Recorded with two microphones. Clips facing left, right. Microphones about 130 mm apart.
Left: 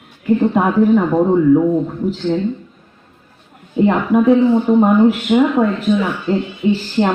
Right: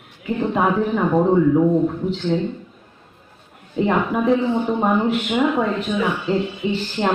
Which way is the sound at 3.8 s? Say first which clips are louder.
Left 6 dB; 5° left (ahead or behind).